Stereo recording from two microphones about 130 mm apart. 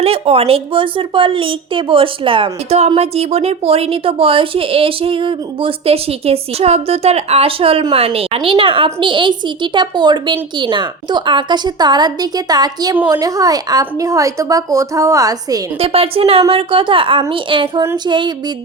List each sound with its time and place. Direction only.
0.0 s speech: 50° right (ahead or behind); by 15.6 s 30° right (ahead or behind)
15.8 s speech: 50° right (ahead or behind)